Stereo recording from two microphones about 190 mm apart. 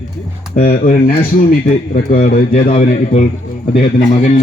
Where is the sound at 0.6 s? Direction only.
50° left (ahead or behind).